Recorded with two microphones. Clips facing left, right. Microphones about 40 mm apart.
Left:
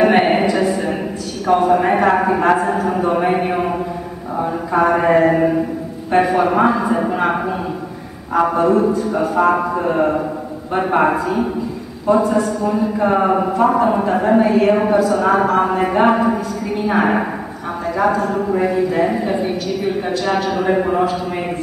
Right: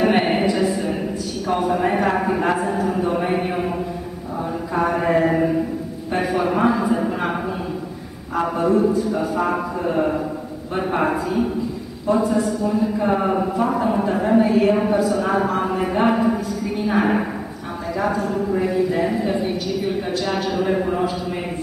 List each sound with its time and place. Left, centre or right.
0.0 s a sound: left
1.5 s speech: centre
1.8 s a man's voice: left
2.9 s a sound: left
4.7 s a man's voice: left
8.6 s speech: left
12.2 s a man's voice: centre
12.6 s a man's voice: left
18.7 s speech: centre
20.2 s a man's voice: centre
20.5 s speech: left